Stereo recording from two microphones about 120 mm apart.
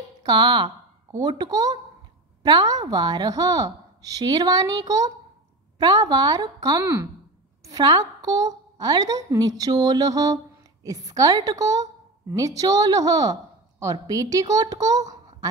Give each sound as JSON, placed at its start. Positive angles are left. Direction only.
{"t": 0.2, "sound": "a woman's voice", "side_deg": -40}
{"t": 6.8, "sound": "a woman's voice", "side_deg": -25}